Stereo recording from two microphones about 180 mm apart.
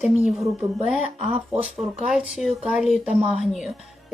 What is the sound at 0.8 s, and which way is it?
Speech, 5° right (ahead or behind).